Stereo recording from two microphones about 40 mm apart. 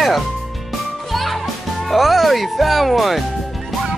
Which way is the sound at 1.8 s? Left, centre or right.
Centre.